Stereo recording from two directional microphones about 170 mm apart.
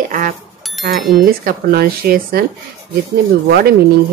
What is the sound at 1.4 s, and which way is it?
Speech, 65° right (ahead or behind).